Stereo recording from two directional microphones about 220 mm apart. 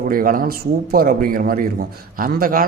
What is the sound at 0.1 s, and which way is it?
Speech, 40° right (ahead or behind).